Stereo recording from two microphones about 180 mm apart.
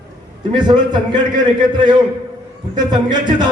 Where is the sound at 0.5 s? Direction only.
25° right (ahead or behind).